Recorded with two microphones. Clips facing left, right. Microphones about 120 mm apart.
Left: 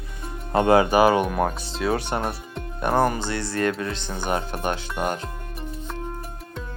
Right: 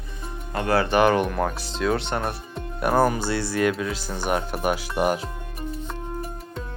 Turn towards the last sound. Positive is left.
turn(degrees=-5)  # may be behind; listen again after turning